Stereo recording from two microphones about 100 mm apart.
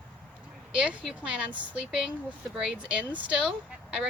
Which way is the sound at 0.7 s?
10° right (ahead or behind).